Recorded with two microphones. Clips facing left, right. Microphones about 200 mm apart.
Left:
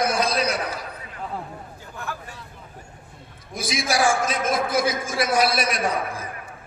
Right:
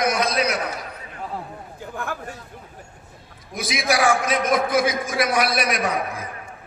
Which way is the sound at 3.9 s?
30° left (ahead or behind).